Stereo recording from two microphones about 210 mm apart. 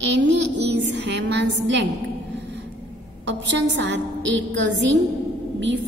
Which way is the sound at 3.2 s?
60° right (ahead or behind).